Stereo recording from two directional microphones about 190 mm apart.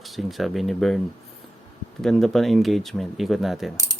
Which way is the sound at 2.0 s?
Centre (ahead or behind).